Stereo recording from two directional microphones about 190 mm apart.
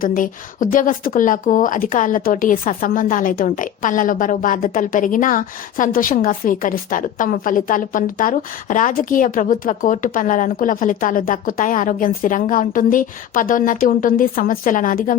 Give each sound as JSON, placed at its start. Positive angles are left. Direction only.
{"t": 0.0, "sound": "speech", "side_deg": 45}